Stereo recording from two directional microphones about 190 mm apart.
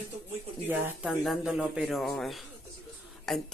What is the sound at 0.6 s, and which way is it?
A woman's voice, 5° right (ahead or behind).